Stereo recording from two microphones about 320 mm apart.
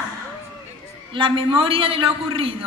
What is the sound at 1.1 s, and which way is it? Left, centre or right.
A man's voice, centre.